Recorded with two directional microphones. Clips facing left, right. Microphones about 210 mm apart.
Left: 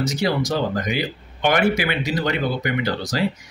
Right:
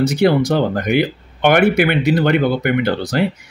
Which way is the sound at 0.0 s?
60° right (ahead or behind).